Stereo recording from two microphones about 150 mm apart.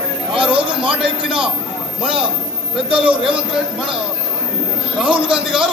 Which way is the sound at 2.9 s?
35° right (ahead or behind).